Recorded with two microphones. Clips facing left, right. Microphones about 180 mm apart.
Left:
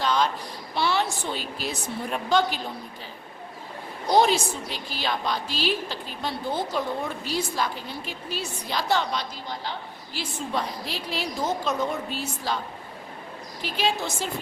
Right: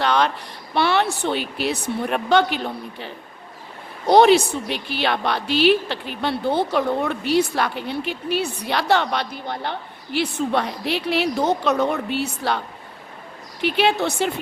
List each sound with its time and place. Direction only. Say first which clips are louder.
0.0 s a sound: right 4 dB; 65° right (ahead or behind)
0.7 s a woman's voice: right 6 dB; 65° right (ahead or behind)
4.1 s a woman's voice: right 7 dB; 65° right (ahead or behind)